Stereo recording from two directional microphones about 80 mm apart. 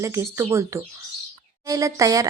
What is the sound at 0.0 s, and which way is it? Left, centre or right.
Speech, right.